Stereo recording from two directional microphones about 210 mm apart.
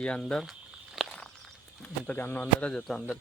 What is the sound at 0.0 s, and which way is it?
Speech, 5° left (ahead or behind).